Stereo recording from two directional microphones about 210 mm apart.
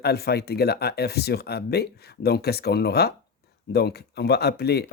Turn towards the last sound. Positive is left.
turn(degrees=50)  # may be behind; listen again after turning